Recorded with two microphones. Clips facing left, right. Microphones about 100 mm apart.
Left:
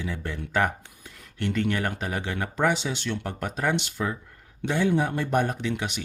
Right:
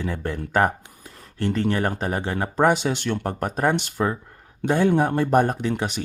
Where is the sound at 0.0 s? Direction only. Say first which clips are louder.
Right 5 dB; 45° right (ahead or behind).